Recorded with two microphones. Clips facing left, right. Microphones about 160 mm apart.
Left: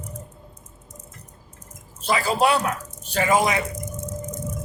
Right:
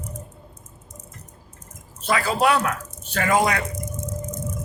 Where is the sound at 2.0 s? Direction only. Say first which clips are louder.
Even; 25° left (ahead or behind).